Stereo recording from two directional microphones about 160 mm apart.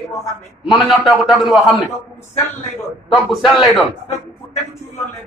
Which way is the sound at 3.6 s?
Centre (ahead or behind).